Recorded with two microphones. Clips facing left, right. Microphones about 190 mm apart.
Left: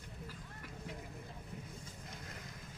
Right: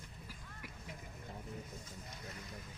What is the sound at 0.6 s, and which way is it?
Vehicle, 10° right (ahead or behind).